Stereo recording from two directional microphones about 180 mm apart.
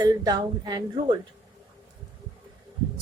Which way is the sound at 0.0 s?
25° right (ahead or behind).